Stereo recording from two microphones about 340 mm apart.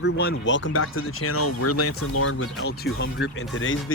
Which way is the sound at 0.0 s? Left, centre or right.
Left.